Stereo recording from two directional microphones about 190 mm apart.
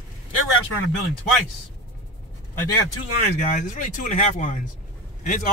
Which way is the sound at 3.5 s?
45° left (ahead or behind).